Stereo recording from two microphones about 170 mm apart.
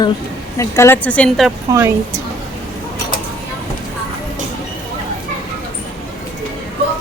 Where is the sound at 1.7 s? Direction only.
20° right (ahead or behind).